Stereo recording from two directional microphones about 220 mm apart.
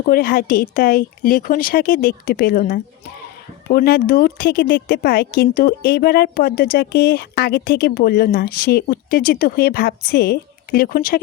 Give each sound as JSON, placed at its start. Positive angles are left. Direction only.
{"t": 0.0, "sound": "a woman's voice", "side_deg": 40}